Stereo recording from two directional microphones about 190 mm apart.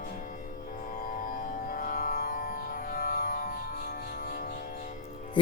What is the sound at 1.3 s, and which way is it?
Music, 50° left (ahead or behind).